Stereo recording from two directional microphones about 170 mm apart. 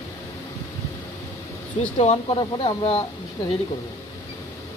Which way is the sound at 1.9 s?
35° left (ahead or behind).